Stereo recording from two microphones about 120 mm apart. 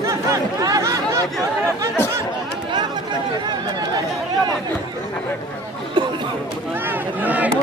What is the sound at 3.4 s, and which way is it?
Chatter, 35° right (ahead or behind).